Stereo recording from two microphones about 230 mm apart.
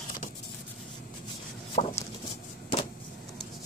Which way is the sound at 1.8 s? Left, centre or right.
Left.